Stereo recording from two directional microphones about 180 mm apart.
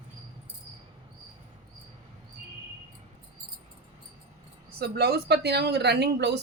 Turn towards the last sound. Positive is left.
turn(degrees=-70)  # may be behind; listen again after turning